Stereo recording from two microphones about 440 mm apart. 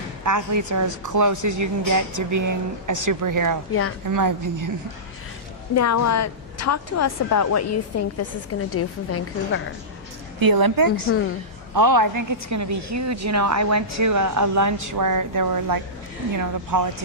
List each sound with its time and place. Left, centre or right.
0.3 s speech: right
3.7 s a woman's voice: left
4.0 s speech: right
5.7 s a woman's voice: left
10.4 s speech: right